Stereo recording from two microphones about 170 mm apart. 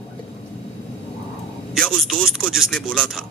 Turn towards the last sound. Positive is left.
turn(degrees=5)  # may be behind; listen again after turning